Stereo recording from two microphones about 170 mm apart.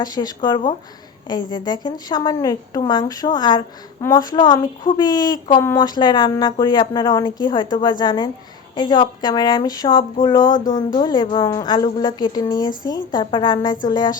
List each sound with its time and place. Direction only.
0.0 s a woman's voice: 25° left (ahead or behind)